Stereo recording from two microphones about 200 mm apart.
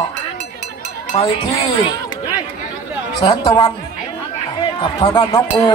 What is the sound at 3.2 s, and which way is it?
Speech, 20° left (ahead or behind).